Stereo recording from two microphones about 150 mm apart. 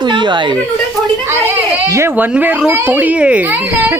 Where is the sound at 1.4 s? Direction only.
20° right (ahead or behind).